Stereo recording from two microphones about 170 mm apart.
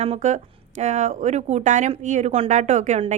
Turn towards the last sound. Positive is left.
turn(degrees=-45)  # may be behind; listen again after turning